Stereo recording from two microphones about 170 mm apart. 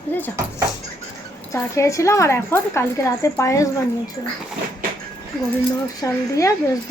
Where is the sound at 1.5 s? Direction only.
20° left (ahead or behind).